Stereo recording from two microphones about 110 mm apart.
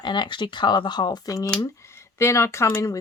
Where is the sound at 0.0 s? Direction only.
45° left (ahead or behind).